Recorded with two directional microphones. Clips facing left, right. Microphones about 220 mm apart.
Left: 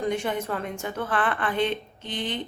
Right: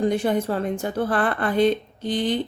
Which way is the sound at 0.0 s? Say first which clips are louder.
Right 6 dB; 35° right (ahead or behind).